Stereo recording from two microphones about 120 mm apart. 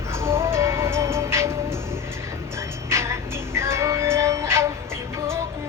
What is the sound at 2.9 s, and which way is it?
Music, 25° right (ahead or behind).